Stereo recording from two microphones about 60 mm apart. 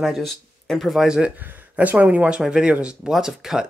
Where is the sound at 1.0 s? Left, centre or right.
Centre.